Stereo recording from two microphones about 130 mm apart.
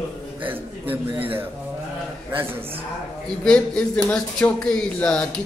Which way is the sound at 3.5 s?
5° left (ahead or behind).